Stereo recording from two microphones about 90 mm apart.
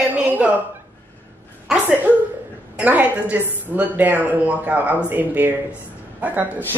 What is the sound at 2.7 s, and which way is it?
A woman's voice, 20° right (ahead or behind).